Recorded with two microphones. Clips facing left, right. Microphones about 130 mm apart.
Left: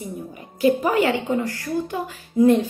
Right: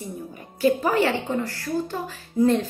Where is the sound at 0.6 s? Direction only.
15° left (ahead or behind).